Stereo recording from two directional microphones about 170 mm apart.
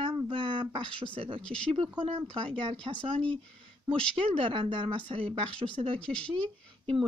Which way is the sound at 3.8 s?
30° right (ahead or behind).